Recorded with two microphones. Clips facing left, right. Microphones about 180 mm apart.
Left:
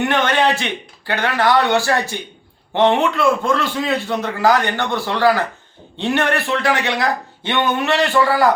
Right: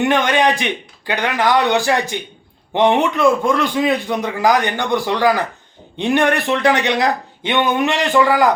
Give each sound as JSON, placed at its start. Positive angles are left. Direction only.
{"t": 0.0, "sound": "a man's voice", "side_deg": -15}